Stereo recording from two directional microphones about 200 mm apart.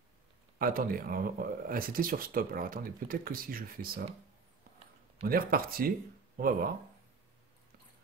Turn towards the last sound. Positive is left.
turn(degrees=-45)  # may be behind; listen again after turning